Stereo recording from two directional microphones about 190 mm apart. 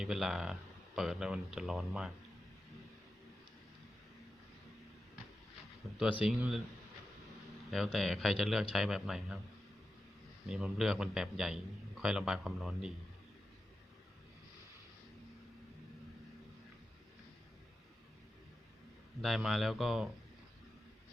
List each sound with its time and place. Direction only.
0.0 s speech: centre (ahead or behind)
6.0 s speech: 5° right (ahead or behind)
7.7 s speech: centre (ahead or behind)
10.5 s speech: centre (ahead or behind)
19.2 s speech: centre (ahead or behind)